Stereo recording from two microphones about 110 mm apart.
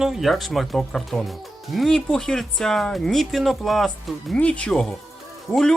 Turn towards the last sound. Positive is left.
turn(degrees=0)  # may be behind; listen again after turning